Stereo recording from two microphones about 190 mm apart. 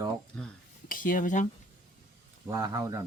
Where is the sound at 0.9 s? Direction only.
45° left (ahead or behind).